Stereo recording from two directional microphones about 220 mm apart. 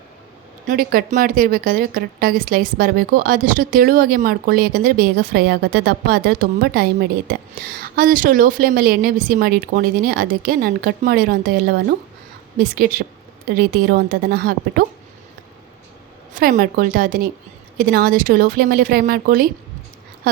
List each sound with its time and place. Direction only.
0.7 s speech: 40° right (ahead or behind)
16.3 s speech: 40° right (ahead or behind)